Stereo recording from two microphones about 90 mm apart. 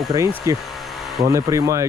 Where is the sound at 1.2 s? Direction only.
40° right (ahead or behind).